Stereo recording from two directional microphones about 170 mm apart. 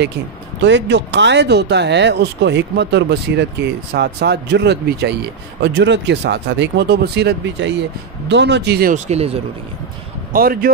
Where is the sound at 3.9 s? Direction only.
75° right (ahead or behind).